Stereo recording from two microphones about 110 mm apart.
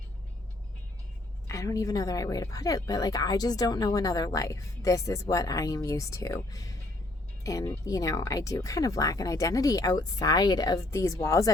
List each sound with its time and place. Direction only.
1.5 s a woman's voice: 30° left (ahead or behind)